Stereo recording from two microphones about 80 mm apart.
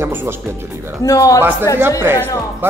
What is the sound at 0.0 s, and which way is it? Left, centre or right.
Speech, right.